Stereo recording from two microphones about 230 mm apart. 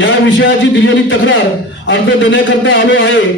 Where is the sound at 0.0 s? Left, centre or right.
Left.